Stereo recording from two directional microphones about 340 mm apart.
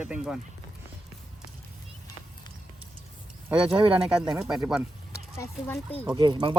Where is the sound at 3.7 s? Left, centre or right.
Centre.